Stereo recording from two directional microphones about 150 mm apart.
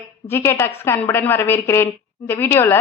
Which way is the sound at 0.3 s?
15° left (ahead or behind).